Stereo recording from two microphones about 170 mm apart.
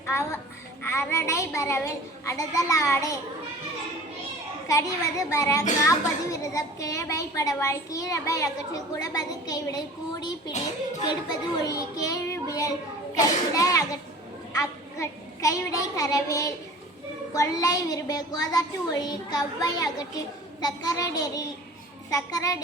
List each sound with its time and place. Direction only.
0.0 s a child's voice: 15° left (ahead or behind)
4.7 s a woman's voice: 20° left (ahead or behind)